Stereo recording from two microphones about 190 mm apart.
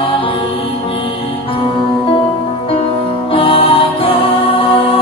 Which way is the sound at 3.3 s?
30° left (ahead or behind).